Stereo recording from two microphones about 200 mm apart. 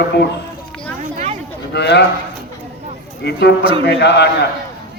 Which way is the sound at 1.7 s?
55° left (ahead or behind).